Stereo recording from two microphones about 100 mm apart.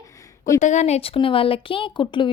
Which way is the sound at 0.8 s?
85° left.